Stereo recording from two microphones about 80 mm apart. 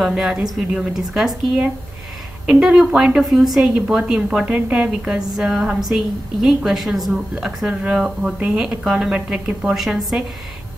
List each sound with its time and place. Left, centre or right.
0.0 s a woman's voice: centre
2.6 s a woman's voice: centre